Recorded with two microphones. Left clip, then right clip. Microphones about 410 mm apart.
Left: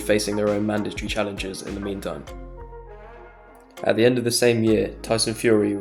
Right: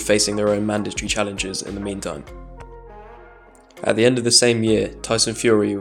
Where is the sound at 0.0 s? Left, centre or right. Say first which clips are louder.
Right 3 dB; left.